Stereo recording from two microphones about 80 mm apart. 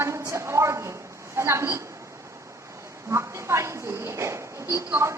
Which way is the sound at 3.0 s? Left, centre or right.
Right.